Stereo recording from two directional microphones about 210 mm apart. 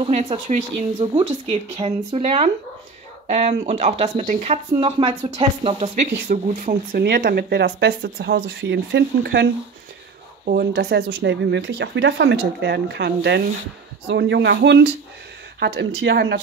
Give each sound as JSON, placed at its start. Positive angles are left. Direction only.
{"t": 0.0, "sound": "speech", "side_deg": -30}
{"t": 6.2, "sound": "speech", "side_deg": -40}